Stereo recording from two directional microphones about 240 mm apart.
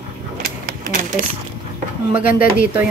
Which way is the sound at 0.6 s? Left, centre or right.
Right.